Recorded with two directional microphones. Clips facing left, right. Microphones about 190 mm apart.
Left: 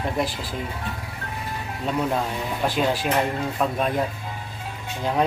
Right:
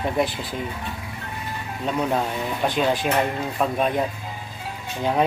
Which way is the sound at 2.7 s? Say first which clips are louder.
Right 1 dB; 5° left (ahead or behind).